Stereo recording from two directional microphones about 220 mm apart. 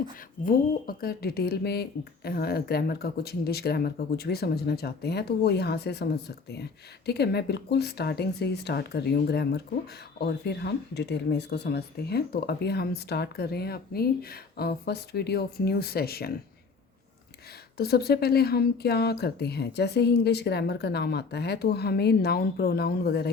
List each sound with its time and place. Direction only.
0.4 s speech: 45° left (ahead or behind)
17.7 s speech: 45° left (ahead or behind)